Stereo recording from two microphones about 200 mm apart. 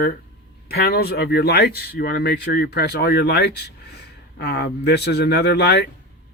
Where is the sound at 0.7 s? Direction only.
50° left (ahead or behind).